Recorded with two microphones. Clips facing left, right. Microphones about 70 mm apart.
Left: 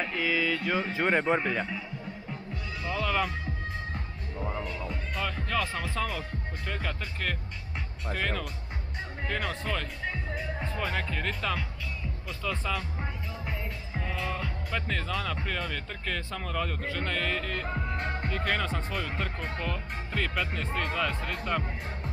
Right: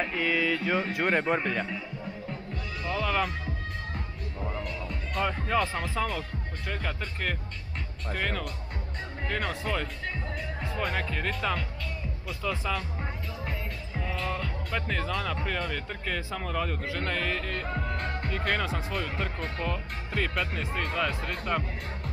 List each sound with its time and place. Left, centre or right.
0.0 s speech: centre
2.8 s speech: centre
3.9 s music: centre
5.2 s speech: centre
17.6 s music: centre
18.2 s speech: centre